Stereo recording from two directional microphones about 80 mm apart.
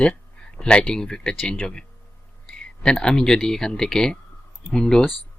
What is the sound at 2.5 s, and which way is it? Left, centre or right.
Speech, centre.